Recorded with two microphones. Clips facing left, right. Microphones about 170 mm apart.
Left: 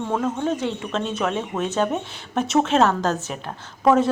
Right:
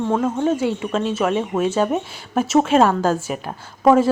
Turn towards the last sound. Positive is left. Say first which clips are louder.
# right 3 dB
turn(degrees=-10)  # may be behind; listen again after turning